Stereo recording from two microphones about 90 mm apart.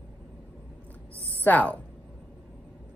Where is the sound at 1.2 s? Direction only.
15° left (ahead or behind).